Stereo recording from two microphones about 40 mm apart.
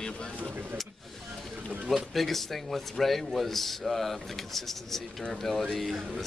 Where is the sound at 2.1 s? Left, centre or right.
Centre.